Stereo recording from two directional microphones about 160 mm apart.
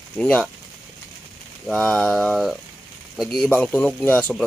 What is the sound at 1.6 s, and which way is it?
Speech, 5° left (ahead or behind).